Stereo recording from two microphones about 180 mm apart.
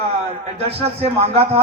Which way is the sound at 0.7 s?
35° right (ahead or behind).